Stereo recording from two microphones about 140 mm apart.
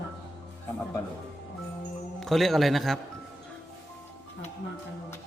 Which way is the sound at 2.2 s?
Centre (ahead or behind).